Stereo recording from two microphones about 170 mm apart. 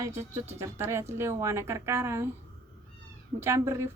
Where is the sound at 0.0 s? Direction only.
15° right (ahead or behind).